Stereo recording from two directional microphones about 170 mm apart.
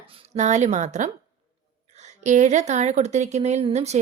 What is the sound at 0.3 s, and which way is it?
Speech, 45° right (ahead or behind).